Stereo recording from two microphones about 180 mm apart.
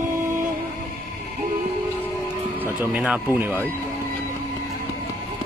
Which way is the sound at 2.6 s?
10° right (ahead or behind).